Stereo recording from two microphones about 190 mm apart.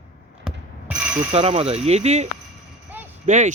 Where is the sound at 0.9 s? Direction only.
30° right (ahead or behind).